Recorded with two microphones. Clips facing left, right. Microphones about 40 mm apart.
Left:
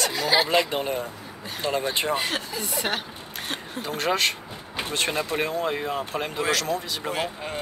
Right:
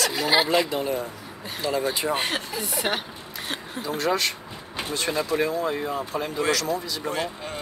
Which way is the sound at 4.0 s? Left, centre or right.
Left.